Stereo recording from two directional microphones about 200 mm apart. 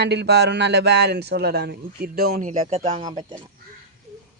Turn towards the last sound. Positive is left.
turn(degrees=-20)  # may be behind; listen again after turning